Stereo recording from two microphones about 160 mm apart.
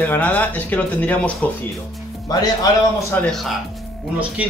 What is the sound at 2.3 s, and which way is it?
Speech, 25° left (ahead or behind).